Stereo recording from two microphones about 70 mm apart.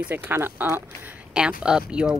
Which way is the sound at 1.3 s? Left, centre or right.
Centre.